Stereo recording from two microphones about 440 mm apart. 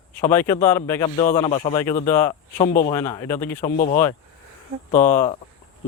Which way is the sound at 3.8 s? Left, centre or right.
Centre.